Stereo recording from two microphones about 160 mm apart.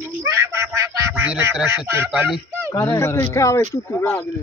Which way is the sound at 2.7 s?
15° left (ahead or behind).